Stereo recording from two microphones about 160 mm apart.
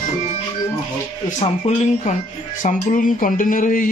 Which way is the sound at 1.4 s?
45° left (ahead or behind).